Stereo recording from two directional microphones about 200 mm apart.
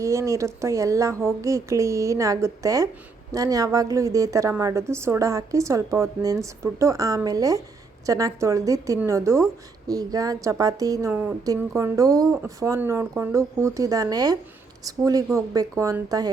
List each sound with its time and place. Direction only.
0.0 s a woman's voice: 15° right (ahead or behind)